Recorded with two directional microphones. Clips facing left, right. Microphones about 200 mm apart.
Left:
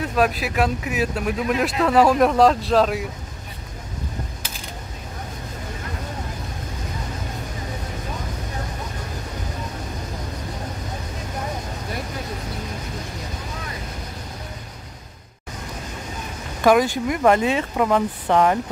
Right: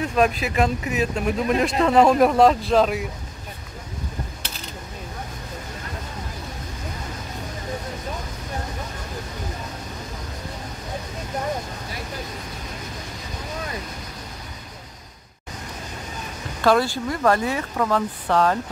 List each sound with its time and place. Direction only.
0.1 s speech: 5° left (ahead or behind)
16.6 s speech: 15° left (ahead or behind)